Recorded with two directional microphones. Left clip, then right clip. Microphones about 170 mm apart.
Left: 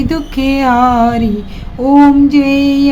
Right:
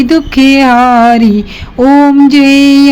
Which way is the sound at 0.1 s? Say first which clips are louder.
Right 8 dB; 30° right (ahead or behind).